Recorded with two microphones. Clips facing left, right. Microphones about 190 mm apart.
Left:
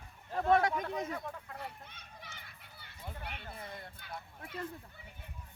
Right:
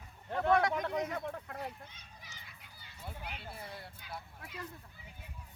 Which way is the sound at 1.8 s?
60° left (ahead or behind).